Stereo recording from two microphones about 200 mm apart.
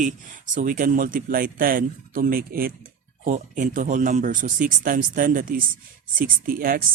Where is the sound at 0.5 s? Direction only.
45° right (ahead or behind).